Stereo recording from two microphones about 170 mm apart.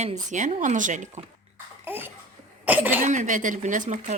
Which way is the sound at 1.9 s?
10° right (ahead or behind).